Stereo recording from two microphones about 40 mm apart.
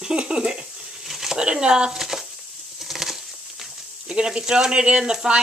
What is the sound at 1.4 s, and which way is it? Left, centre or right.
Speech, right.